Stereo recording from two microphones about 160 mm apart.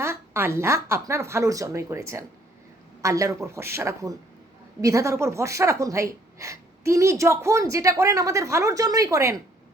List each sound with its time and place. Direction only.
0.0 s a woman's voice: 15° right (ahead or behind)